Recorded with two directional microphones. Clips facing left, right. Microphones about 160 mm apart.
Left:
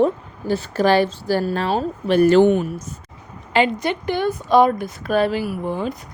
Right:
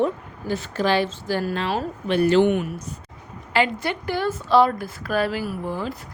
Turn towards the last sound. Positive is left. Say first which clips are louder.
# left 4 dB
turn(degrees=20)  # may be behind; listen again after turning